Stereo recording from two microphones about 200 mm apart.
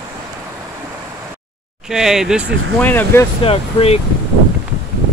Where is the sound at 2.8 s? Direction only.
10° left (ahead or behind).